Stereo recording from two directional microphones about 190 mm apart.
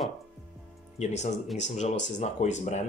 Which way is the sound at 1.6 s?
35° left (ahead or behind).